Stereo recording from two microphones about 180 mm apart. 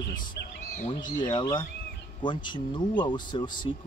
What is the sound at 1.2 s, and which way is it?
Speech, 25° left (ahead or behind).